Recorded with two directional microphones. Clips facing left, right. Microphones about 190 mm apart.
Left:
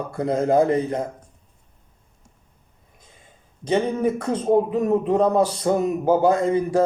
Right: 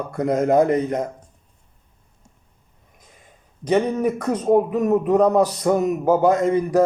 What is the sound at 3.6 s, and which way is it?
A man's voice, 25° left (ahead or behind).